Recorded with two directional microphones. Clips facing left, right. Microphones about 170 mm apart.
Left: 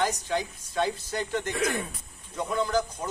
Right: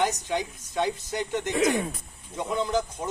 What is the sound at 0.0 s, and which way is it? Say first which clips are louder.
Speech: right 1 dB; 20° right (ahead or behind).